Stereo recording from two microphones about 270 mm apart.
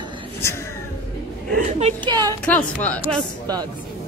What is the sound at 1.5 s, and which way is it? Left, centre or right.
Speech, right.